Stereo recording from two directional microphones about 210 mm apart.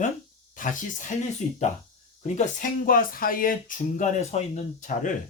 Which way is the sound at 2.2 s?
35° left (ahead or behind).